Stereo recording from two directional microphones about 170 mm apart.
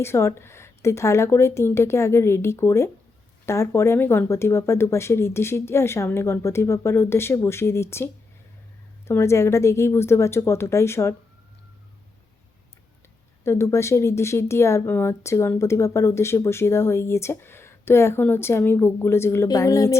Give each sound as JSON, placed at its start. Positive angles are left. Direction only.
{"t": 0.0, "sound": "speech", "side_deg": 15}
{"t": 13.4, "sound": "speech", "side_deg": 15}